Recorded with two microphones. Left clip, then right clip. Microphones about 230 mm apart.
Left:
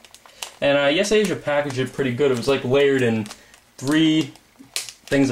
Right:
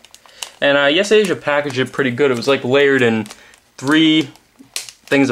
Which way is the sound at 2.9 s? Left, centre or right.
Centre.